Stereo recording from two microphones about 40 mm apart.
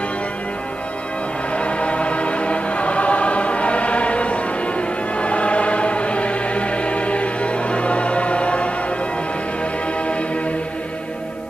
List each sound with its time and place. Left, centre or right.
1.5 s choir: left